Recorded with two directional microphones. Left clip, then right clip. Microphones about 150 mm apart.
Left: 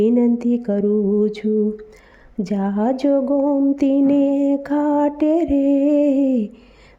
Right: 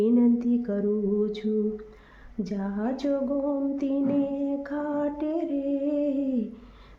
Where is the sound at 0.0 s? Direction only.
45° left (ahead or behind).